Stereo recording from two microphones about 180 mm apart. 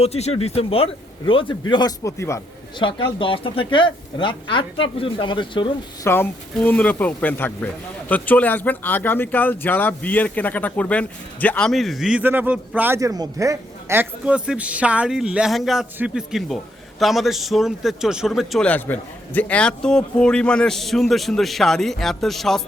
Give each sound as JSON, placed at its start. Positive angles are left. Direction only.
{"t": 0.0, "sound": "speech", "side_deg": 35}
{"t": 2.7, "sound": "speech", "side_deg": 25}
{"t": 6.1, "sound": "speech", "side_deg": 10}